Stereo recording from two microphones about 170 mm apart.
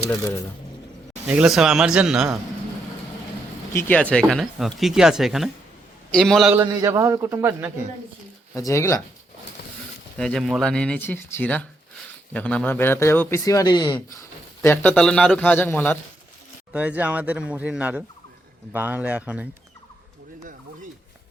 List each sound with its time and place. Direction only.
0.1 s a man's voice: 20° left (ahead or behind)
1.3 s speech: 5° right (ahead or behind)
3.7 s speech: 10° left (ahead or behind)
6.5 s speech: 15° right (ahead or behind)
8.5 s speech: 15° left (ahead or behind)
10.2 s a man's voice: 5° left (ahead or behind); by 14.2 s 25° left (ahead or behind)
14.6 s a man's voice: 10° left (ahead or behind)
16.7 s speech: 10° right (ahead or behind)